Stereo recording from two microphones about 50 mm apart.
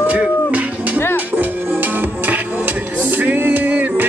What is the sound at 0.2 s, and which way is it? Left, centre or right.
Music, right.